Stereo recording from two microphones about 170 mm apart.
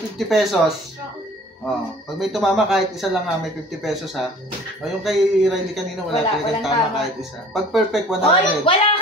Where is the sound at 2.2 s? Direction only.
Centre (ahead or behind).